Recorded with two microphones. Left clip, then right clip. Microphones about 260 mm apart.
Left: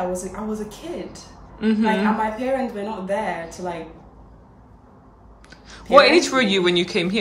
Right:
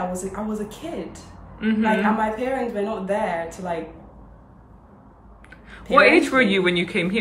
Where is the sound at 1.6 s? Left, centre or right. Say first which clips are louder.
Even; centre.